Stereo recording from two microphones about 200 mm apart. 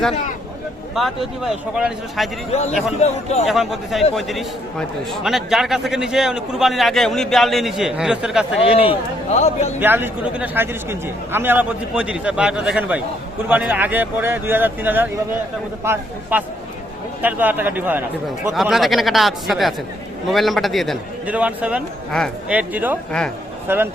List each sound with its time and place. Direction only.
0.9 s a man's voice: centre (ahead or behind)
2.5 s a man's voice: 35° left (ahead or behind)
3.4 s a man's voice: centre (ahead or behind)
8.6 s a man's voice: 30° left (ahead or behind)
9.8 s a man's voice: 10° right (ahead or behind)